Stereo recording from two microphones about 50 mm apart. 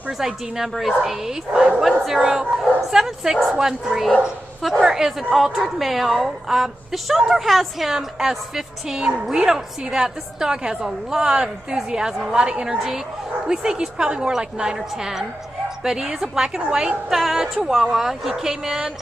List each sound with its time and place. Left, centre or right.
0.2 s a woman's voice: centre